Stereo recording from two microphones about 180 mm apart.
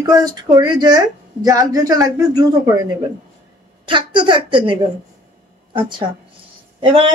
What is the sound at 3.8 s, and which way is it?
Speech, 25° right (ahead or behind).